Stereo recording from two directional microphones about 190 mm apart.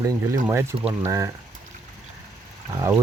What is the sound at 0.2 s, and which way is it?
Speech, 15° right (ahead or behind).